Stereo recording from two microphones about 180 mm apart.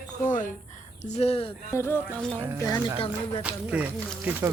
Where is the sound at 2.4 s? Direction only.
10° right (ahead or behind).